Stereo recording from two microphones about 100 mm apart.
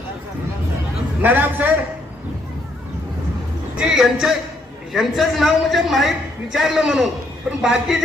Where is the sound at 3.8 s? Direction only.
5° right (ahead or behind).